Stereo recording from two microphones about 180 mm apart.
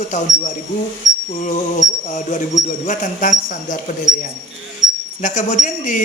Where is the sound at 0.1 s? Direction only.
40° left (ahead or behind).